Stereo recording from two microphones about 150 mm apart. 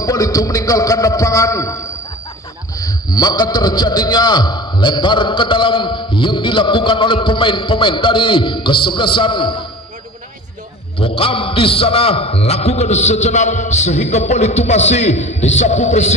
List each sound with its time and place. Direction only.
0.0 s a man's voice: 25° left (ahead or behind)
11.0 s a man's voice: 35° left (ahead or behind)